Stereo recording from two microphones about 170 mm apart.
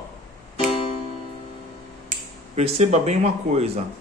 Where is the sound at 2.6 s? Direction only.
40° right (ahead or behind).